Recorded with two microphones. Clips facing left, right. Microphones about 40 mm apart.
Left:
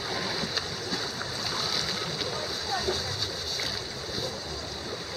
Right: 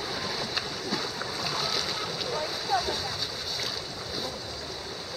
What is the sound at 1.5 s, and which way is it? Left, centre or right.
Boat, centre.